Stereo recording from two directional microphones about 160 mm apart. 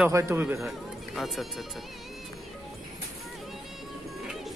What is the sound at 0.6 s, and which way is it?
Speech, centre (ahead or behind).